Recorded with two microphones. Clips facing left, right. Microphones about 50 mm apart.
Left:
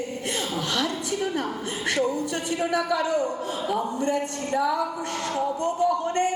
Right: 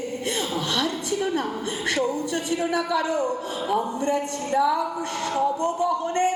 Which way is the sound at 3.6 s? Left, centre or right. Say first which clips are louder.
Right 3 dB; centre.